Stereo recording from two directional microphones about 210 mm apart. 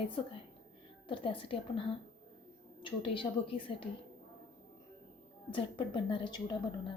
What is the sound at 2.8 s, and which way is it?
A woman's voice, 25° left (ahead or behind).